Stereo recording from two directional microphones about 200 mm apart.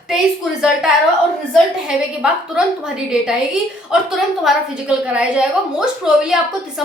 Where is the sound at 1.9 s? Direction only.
5° right (ahead or behind).